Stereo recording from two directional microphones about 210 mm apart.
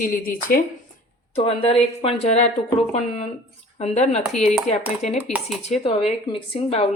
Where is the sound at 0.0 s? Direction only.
40° left (ahead or behind).